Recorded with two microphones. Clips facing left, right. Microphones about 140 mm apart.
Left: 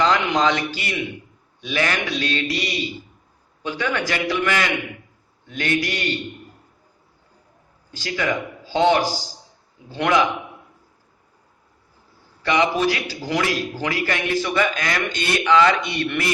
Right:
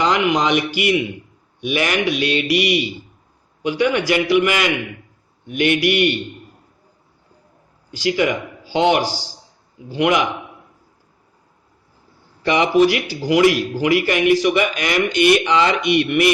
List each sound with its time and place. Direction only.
0.0 s a man's voice: 15° right (ahead or behind)
7.9 s a man's voice: 15° right (ahead or behind)
12.4 s a man's voice: 20° right (ahead or behind)